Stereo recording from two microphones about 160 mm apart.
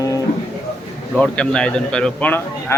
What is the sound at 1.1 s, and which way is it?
Speech, 5° left (ahead or behind).